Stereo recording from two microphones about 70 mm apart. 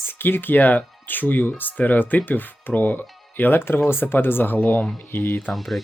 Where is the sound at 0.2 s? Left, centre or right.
Left.